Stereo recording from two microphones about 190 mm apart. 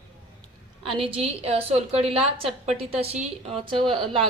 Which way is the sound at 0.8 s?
30° right (ahead or behind).